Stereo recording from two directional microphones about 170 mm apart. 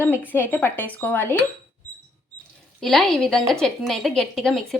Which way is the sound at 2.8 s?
Centre (ahead or behind).